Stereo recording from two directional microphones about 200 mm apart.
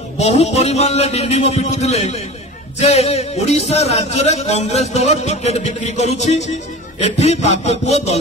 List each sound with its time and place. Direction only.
0.2 s a man's voice: 35° left (ahead or behind)